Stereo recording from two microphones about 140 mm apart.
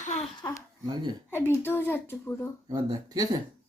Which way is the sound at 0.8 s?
30° right (ahead or behind).